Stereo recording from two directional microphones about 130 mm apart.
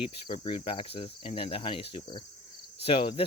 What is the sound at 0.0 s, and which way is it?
Cricket, 40° left (ahead or behind).